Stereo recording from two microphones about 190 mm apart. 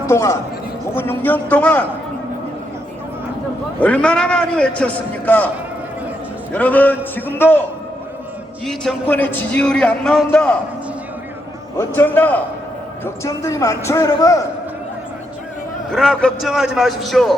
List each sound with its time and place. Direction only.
0.0 s a man's voice: 15° left (ahead or behind)
3.8 s a man's voice: 5° left (ahead or behind)
6.5 s a man's voice: 10° left (ahead or behind)
8.6 s a man's voice: 5° left (ahead or behind)
11.8 s a man's voice: 10° left (ahead or behind)
15.9 s a man's voice: centre (ahead or behind)